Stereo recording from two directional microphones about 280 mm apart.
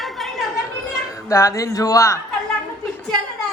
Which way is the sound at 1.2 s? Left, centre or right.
Centre.